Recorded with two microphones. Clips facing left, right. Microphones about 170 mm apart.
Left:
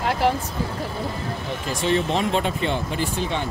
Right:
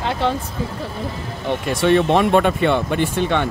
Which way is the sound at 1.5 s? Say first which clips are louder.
Right 7 dB; 65° right (ahead or behind).